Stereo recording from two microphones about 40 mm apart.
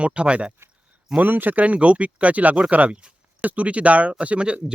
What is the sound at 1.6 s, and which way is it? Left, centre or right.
Speech, right.